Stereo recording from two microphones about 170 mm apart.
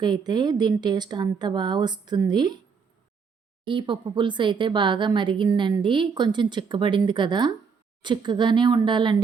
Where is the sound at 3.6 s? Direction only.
30° right (ahead or behind).